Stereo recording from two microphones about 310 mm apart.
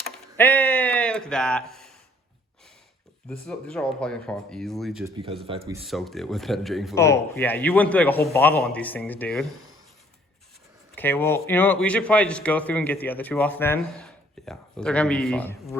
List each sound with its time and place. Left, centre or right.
0.0 s a sound: centre
3.2 s a man's voice: centre
5.1 s speech: centre
5.8 s a man's voice: centre
10.9 s a man's voice: centre